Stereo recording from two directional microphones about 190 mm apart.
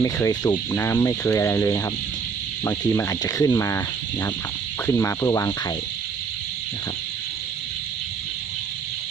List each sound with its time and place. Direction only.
0.0 s speech: 15° left (ahead or behind)